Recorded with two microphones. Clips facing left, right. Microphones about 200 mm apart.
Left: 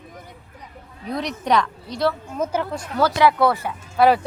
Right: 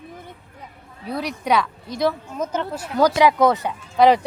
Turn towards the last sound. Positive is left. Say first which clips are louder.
# right 1 dB
turn(degrees=-15)  # may be behind; listen again after turning